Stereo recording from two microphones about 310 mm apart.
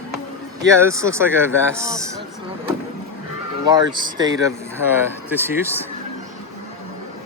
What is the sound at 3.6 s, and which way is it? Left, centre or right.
Speech, centre.